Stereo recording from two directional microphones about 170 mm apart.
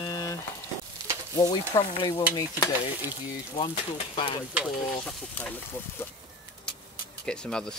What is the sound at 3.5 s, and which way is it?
Speech, 35° left (ahead or behind).